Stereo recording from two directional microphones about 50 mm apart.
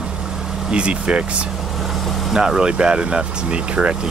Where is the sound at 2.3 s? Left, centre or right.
Centre.